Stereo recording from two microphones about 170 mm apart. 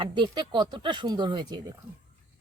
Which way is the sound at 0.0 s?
30° right (ahead or behind).